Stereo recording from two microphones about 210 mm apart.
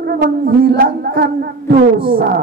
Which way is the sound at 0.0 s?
50° right (ahead or behind).